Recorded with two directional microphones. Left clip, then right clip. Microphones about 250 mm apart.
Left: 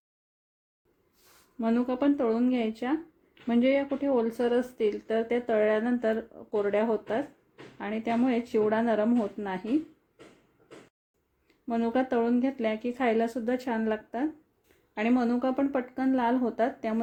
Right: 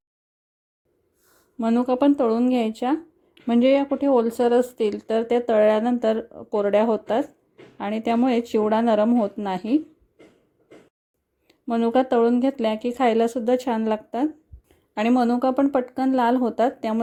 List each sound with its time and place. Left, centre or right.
1.5 s speech: right
11.4 s speech: right